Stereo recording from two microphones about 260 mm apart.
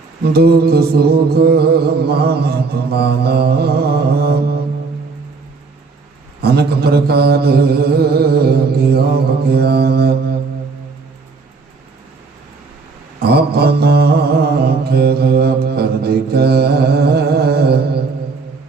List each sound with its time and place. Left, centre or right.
0.3 s mantra: right
6.4 s mantra: right
13.2 s mantra: right